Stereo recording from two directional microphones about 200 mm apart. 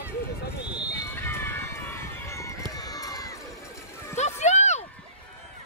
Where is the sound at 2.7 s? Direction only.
20° left (ahead or behind).